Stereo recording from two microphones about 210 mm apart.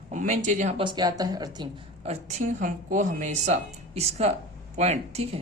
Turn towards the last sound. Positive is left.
turn(degrees=-30)  # may be behind; listen again after turning